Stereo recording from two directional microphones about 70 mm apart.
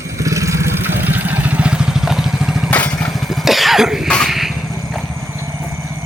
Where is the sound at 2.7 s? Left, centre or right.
Left.